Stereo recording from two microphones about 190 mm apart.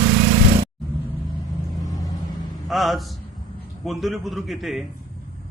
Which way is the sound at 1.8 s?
20° left (ahead or behind).